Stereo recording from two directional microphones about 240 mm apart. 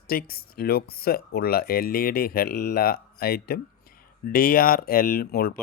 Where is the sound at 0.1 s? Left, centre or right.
Left.